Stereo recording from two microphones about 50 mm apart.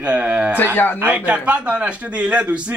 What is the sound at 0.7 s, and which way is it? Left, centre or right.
Speech, left.